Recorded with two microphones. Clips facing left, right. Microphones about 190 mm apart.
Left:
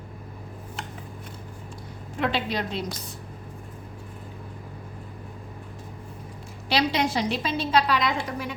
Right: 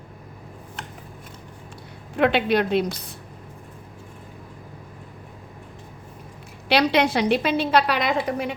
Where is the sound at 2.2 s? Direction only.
60° right (ahead or behind).